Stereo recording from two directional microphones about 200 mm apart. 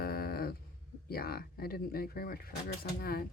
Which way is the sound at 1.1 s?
50° left (ahead or behind).